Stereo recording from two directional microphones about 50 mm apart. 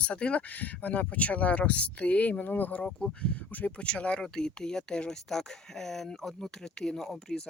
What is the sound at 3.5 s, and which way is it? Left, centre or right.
Speech, left.